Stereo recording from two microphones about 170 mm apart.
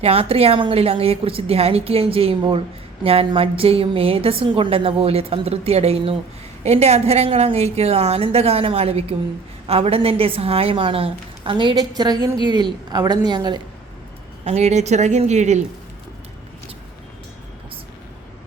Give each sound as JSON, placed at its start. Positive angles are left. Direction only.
{"t": 0.0, "sound": "a woman's voice", "side_deg": -35}
{"t": 14.4, "sound": "a woman's voice", "side_deg": -40}